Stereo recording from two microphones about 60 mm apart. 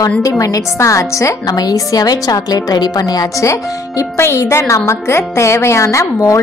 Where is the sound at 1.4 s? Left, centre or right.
Left.